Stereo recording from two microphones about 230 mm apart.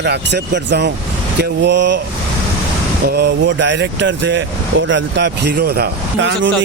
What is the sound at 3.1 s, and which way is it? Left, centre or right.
Speech, right.